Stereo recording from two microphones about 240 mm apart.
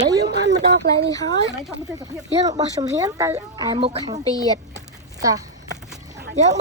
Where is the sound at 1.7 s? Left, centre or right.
Centre.